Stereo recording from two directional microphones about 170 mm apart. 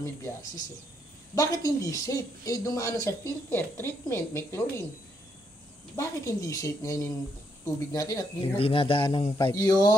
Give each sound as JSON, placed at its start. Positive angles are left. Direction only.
{"t": 0.0, "sound": "a woman's voice", "side_deg": 15}
{"t": 5.9, "sound": "a man's voice", "side_deg": 20}
{"t": 8.5, "sound": "a man's voice", "side_deg": 35}